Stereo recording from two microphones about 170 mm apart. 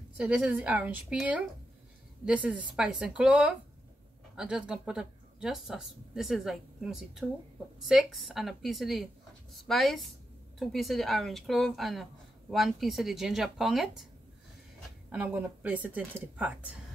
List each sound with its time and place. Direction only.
0.2 s speech: 10° right (ahead or behind)
15.0 s speech: 10° right (ahead or behind)